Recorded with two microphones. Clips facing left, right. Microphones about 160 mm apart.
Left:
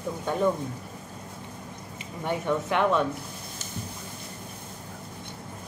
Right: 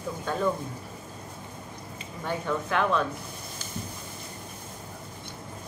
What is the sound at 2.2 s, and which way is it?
Speech, 20° left (ahead or behind).